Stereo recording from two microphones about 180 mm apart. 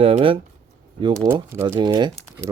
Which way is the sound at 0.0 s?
30° right (ahead or behind).